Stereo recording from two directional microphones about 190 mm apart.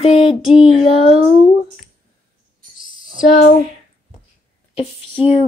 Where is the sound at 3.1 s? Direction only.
45° left (ahead or behind).